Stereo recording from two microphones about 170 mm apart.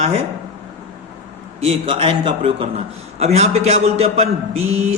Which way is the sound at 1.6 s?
35° right (ahead or behind).